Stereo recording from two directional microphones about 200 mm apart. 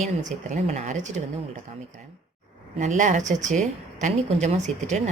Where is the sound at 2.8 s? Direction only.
35° right (ahead or behind).